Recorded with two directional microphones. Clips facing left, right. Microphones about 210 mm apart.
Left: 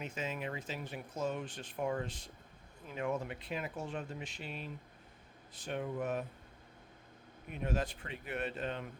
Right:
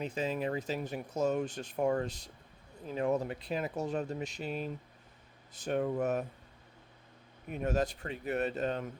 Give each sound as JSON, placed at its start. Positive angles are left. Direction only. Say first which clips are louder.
{"t": 0.0, "sound": "speech", "louder": "right 6 dB", "side_deg": -35}
{"t": 7.5, "sound": "speech", "louder": "right 5 dB", "side_deg": -45}